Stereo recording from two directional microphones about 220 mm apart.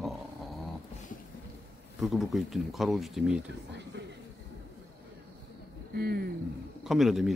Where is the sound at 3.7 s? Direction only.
50° right (ahead or behind).